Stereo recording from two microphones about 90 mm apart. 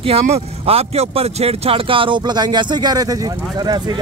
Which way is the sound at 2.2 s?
50° right (ahead or behind).